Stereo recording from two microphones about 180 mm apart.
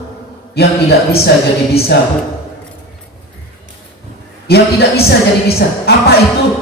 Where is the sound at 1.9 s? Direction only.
70° left (ahead or behind).